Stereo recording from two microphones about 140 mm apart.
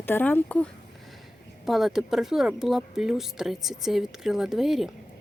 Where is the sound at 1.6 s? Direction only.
Centre (ahead or behind).